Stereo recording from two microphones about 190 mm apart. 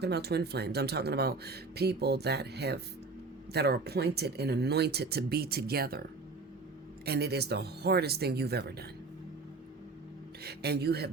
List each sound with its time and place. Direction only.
0.0 s speech: 60° right (ahead or behind)
10.4 s speech: 60° right (ahead or behind)